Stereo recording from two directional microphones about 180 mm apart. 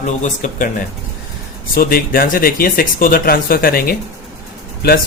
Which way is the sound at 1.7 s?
50° left (ahead or behind).